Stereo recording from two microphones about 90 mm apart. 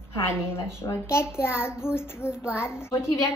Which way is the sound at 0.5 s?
30° left (ahead or behind).